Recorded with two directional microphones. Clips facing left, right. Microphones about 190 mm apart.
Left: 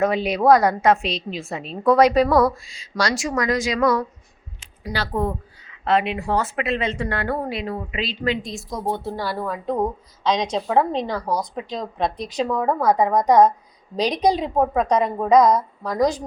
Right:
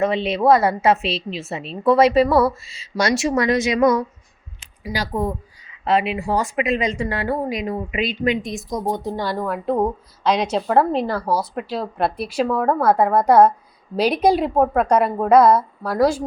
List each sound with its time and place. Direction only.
0.0 s a woman's voice: centre (ahead or behind)
3.0 s speech: 25° right (ahead or behind)
4.8 s a woman's voice: 10° right (ahead or behind)